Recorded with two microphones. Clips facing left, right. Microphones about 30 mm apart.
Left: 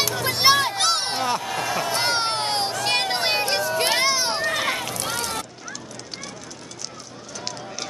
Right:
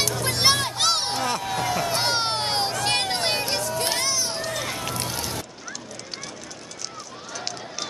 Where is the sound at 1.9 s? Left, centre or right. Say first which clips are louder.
Left 1 dB; centre.